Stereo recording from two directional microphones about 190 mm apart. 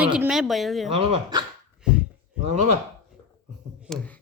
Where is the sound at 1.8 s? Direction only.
5° right (ahead or behind).